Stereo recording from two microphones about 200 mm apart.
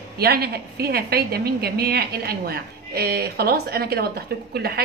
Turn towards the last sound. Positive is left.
turn(degrees=-50)  # may be behind; listen again after turning